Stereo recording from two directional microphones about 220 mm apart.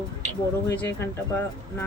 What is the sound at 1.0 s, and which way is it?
Speech, 10° left (ahead or behind).